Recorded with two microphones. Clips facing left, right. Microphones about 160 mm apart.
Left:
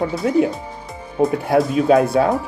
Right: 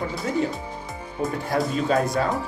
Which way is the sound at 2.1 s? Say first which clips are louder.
Left 7 dB; 70° left (ahead or behind).